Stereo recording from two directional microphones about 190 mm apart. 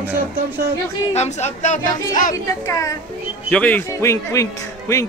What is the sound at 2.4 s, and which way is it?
A man's voice, 15° left (ahead or behind).